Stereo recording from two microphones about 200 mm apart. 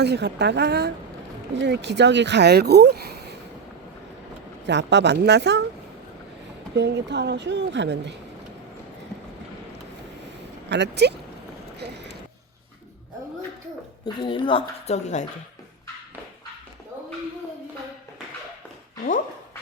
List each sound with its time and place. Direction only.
0.0 s speech: 55° right (ahead or behind)
4.6 s speech: 60° right (ahead or behind)
6.7 s speech: 60° right (ahead or behind)
10.7 s speech: 60° right (ahead or behind)
14.0 s speech: 25° left (ahead or behind)